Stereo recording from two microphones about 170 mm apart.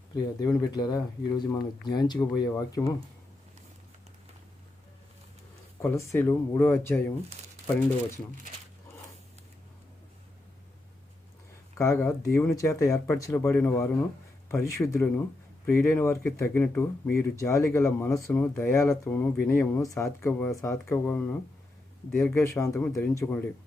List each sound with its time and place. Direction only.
0.1 s speech: 20° left (ahead or behind)
5.8 s speech: 15° left (ahead or behind)
11.8 s speech: 15° left (ahead or behind)